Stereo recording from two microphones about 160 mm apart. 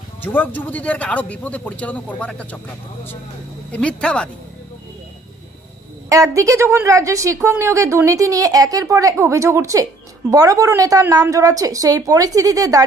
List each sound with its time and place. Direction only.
0.2 s a man's voice: 10° left (ahead or behind)
6.0 s a woman's voice: 20° right (ahead or behind)